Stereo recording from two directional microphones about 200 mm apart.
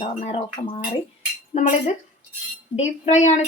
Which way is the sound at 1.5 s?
40° left (ahead or behind).